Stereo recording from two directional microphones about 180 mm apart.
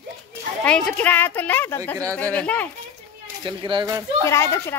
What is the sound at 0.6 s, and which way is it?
A woman's voice, 5° left (ahead or behind).